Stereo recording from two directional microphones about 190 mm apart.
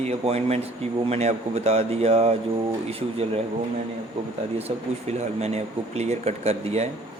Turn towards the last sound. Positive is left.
turn(degrees=-35)  # may be behind; listen again after turning